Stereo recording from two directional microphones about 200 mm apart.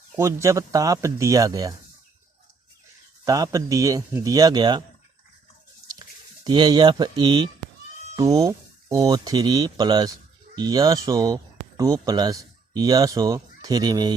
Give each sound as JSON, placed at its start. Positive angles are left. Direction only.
{"t": 0.2, "sound": "speech", "side_deg": -15}
{"t": 3.2, "sound": "speech", "side_deg": -15}
{"t": 5.9, "sound": "speech", "side_deg": -20}